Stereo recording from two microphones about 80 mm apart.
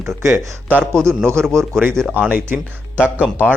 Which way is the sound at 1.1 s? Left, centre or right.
Right.